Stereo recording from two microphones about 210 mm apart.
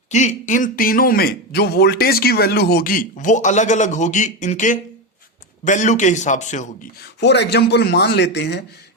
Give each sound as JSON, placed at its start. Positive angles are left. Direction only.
{"t": 0.1, "sound": "a man's voice", "side_deg": 35}
{"t": 7.0, "sound": "speech", "side_deg": 55}